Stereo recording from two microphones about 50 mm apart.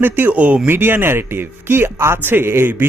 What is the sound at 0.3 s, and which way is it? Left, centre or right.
Speech, right.